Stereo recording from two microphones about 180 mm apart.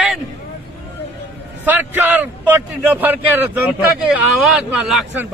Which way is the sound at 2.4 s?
10° right (ahead or behind).